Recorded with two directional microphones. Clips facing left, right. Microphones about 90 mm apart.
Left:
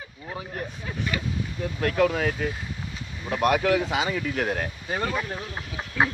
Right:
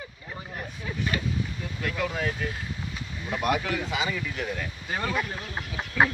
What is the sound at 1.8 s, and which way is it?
Speech, 55° left (ahead or behind).